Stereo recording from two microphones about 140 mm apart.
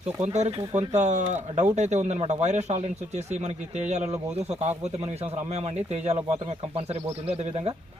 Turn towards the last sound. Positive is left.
turn(degrees=-45)  # may be behind; listen again after turning